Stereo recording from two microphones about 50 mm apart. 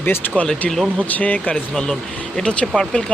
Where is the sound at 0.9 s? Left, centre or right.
Left.